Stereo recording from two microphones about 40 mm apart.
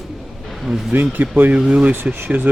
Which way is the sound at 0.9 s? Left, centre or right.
Right.